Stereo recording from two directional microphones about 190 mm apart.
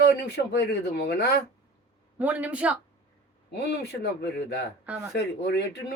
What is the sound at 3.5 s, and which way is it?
Speech, 60° left (ahead or behind).